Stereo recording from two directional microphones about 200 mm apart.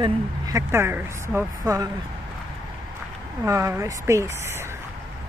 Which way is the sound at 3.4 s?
15° right (ahead or behind).